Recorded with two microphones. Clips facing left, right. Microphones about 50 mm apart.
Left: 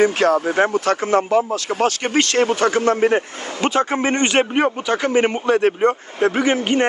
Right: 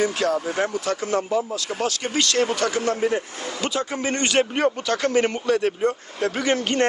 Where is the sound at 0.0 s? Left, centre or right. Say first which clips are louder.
Left 6 dB; left.